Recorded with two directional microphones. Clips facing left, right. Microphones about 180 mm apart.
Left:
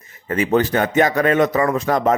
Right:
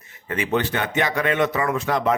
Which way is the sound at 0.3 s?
40° left (ahead or behind).